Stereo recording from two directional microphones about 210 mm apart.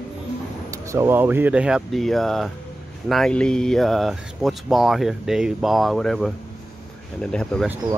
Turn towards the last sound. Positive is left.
turn(degrees=5)  # may be behind; listen again after turning